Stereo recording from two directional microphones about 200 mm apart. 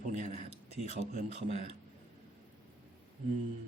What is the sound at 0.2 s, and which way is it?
Speech, 35° right (ahead or behind).